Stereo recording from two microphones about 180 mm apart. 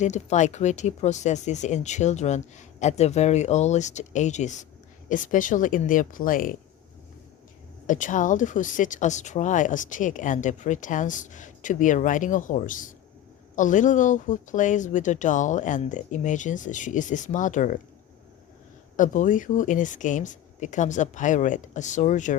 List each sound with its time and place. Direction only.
0.0 s speech: 40° left (ahead or behind)
7.9 s speech: 45° left (ahead or behind)
18.9 s speech: 45° left (ahead or behind)